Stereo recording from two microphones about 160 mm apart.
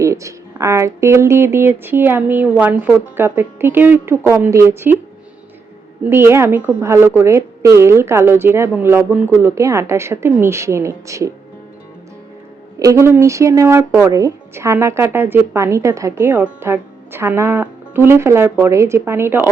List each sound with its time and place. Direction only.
0.0 s speech: 20° right (ahead or behind)
6.1 s speech: 15° right (ahead or behind)
12.8 s speech: 20° right (ahead or behind)